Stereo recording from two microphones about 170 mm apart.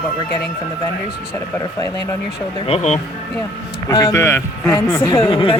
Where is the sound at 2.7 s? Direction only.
40° left (ahead or behind).